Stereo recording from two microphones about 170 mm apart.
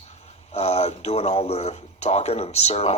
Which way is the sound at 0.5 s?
40° left (ahead or behind).